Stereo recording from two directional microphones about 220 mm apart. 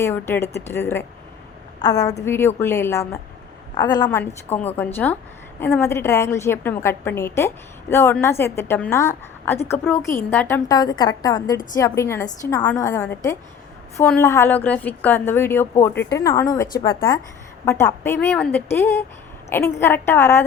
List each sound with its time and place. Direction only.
0.0 s a woman's voice: 10° left (ahead or behind)
17.7 s a woman's voice: 10° left (ahead or behind)